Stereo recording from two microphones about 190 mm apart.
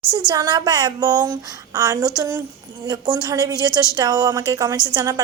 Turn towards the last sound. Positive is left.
turn(degrees=-20)  # may be behind; listen again after turning